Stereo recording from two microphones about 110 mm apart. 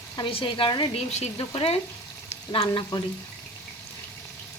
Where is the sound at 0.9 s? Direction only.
90° left.